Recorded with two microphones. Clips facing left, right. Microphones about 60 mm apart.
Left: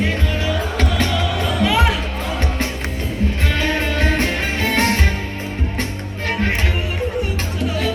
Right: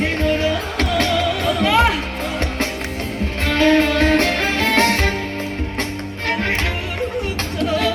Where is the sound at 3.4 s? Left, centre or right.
Right.